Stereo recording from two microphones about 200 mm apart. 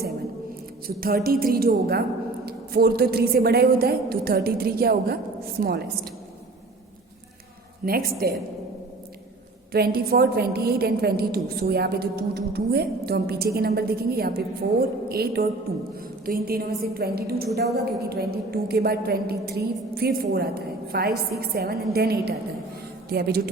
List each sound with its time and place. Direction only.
0.9 s a woman's voice: 45° right (ahead or behind)
7.9 s a woman's voice: 50° right (ahead or behind)
9.7 s a woman's voice: 50° right (ahead or behind)